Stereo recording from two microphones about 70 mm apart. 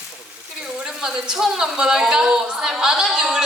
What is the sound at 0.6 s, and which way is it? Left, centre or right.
Speech, centre.